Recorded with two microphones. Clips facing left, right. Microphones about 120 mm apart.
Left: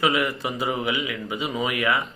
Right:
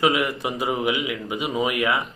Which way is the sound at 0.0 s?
20° right (ahead or behind).